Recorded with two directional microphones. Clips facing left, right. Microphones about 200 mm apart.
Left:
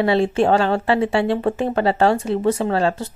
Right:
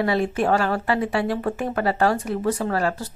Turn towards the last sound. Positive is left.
turn(degrees=25)  # may be behind; listen again after turning